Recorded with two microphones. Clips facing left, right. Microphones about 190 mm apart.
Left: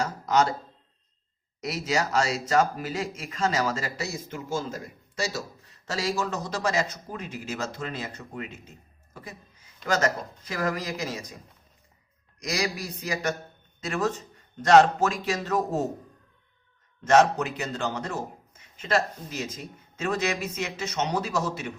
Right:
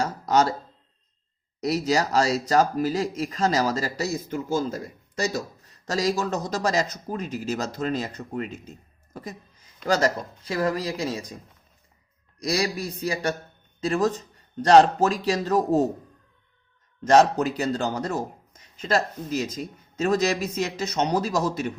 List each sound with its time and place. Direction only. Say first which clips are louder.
0.0 s a sound: right 2 dB; 35° right (ahead or behind)
1.6 s speech: right 5 dB; 35° right (ahead or behind)
9.8 s speech: right 3 dB; 35° right (ahead or behind)
12.4 s speech: right 4 dB; 30° right (ahead or behind)
17.0 s speech: right 2 dB; 35° right (ahead or behind)